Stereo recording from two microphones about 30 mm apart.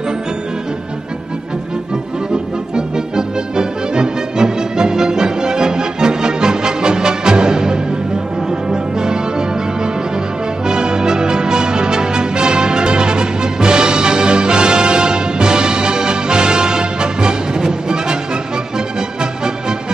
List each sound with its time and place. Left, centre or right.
2.7 s music: right
10.7 s music: right